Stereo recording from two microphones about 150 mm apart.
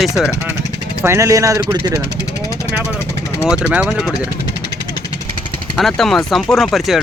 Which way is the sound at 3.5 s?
5° right (ahead or behind).